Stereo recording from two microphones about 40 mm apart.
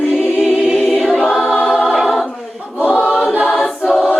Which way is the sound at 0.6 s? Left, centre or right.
Centre.